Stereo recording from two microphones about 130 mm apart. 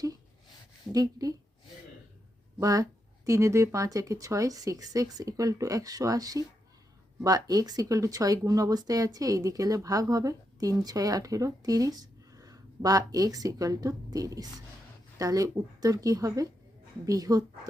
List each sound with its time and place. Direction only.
0.9 s speech: 30° right (ahead or behind)
2.6 s speech: 25° right (ahead or behind)